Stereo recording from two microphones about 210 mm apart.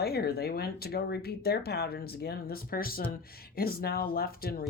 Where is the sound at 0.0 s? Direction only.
50° left (ahead or behind).